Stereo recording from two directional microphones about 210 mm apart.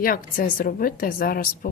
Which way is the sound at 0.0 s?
40° left (ahead or behind).